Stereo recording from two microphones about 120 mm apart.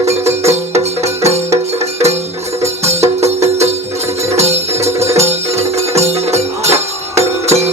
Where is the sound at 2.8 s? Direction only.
65° right (ahead or behind).